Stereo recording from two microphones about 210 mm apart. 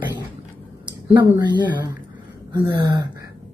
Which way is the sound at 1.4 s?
20° right (ahead or behind).